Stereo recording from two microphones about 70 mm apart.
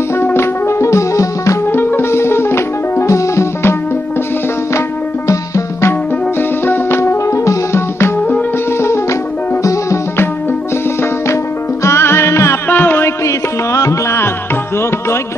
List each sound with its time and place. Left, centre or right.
0.1 s music: left
1.7 s music: left
4.7 s music: left
6.6 s music: left
11.8 s music: left
12.7 s music: left
13.2 s music: left